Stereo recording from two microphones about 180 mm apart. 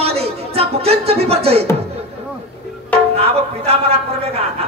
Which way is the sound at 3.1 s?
35° right (ahead or behind).